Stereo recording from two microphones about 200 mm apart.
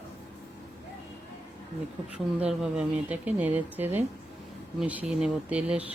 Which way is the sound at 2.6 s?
5° right (ahead or behind).